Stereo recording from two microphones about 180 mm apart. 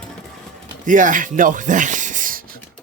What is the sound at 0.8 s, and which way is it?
Speech, 45° right (ahead or behind).